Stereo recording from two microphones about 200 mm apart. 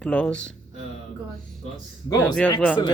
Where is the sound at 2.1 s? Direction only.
20° left (ahead or behind).